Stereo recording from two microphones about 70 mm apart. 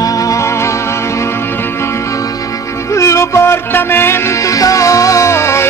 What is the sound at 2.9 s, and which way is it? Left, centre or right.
Music, left.